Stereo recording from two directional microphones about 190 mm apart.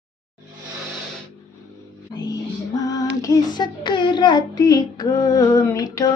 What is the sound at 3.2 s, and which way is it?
Child singing, 20° left (ahead or behind).